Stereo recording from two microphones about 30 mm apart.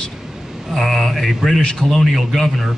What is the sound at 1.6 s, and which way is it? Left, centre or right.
Speech, left.